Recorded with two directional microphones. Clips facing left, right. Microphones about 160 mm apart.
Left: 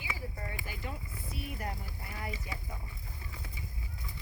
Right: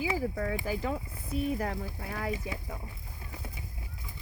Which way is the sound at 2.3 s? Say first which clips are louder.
Right 7 dB; 55° right (ahead or behind).